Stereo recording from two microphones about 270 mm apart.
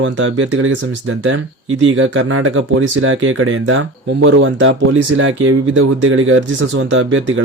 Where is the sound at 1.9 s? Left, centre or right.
Right.